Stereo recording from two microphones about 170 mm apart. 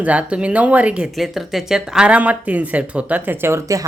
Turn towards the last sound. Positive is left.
turn(degrees=-15)  # may be behind; listen again after turning